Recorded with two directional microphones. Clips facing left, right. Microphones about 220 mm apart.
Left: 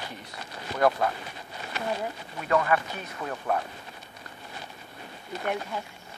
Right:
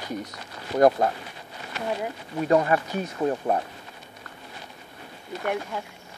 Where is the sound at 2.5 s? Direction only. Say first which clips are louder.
Right 3 dB; 30° right (ahead or behind).